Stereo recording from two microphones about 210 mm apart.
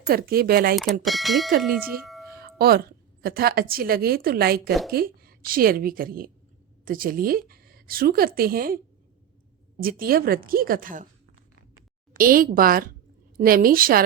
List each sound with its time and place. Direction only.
0.1 s a woman's voice: 45° right (ahead or behind)
1.0 s speech: centre (ahead or behind)
2.3 s a woman's voice: 45° right (ahead or behind)
9.8 s a woman's voice: 45° right (ahead or behind)
12.1 s a woman's voice: 40° right (ahead or behind)